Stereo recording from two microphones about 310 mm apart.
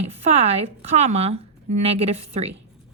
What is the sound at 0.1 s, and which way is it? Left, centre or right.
A woman's voice, centre.